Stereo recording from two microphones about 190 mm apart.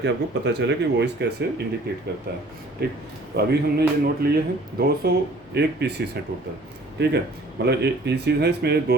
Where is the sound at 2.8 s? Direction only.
55° right (ahead or behind).